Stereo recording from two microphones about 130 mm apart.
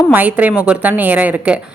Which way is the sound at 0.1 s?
15° right (ahead or behind).